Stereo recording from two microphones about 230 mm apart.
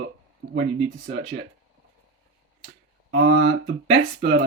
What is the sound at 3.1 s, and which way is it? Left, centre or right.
Speech, right.